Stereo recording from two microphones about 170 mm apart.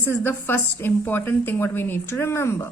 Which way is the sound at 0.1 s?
10° left (ahead or behind).